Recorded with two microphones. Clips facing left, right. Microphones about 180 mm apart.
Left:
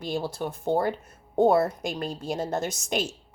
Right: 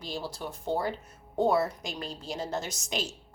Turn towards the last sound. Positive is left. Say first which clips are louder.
# left 6 dB
turn(degrees=50)  # may be behind; listen again after turning